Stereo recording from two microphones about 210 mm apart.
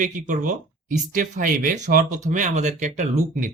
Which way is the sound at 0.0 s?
40° right (ahead or behind).